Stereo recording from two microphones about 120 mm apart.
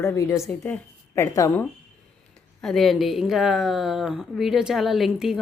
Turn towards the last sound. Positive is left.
turn(degrees=0)  # may be behind; listen again after turning